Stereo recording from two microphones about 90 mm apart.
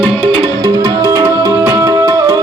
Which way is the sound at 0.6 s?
40° right (ahead or behind).